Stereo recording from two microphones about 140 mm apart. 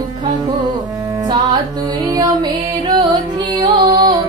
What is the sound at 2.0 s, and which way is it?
Music, 30° right (ahead or behind).